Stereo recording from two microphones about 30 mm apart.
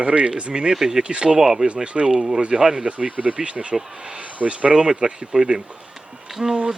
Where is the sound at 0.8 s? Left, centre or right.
Centre.